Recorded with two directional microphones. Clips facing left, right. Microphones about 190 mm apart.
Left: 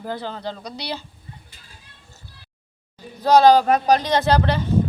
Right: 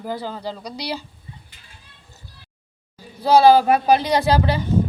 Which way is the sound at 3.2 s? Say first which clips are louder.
Even; 10° right (ahead or behind).